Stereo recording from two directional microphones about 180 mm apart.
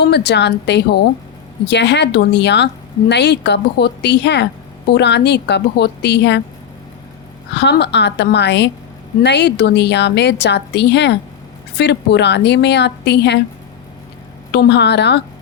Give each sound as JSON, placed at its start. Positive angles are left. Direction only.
{"t": 0.0, "sound": "a woman's voice", "side_deg": 65}
{"t": 7.5, "sound": "a woman's voice", "side_deg": 70}
{"t": 14.5, "sound": "a woman's voice", "side_deg": 70}